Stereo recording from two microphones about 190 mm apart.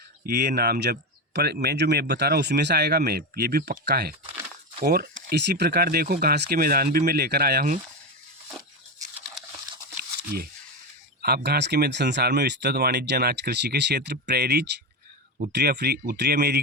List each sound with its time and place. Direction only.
0.3 s speech: 55° right (ahead or behind)
11.2 s speech: 55° right (ahead or behind)